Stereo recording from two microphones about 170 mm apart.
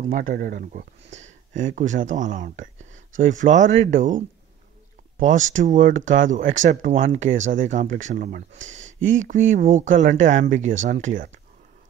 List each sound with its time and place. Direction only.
0.0 s speech: 50° right (ahead or behind)
5.2 s speech: 45° right (ahead or behind)